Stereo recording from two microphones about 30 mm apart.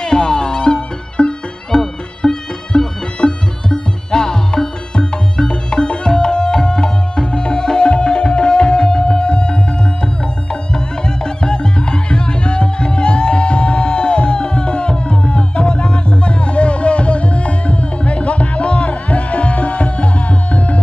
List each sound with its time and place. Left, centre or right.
0.0 s music: left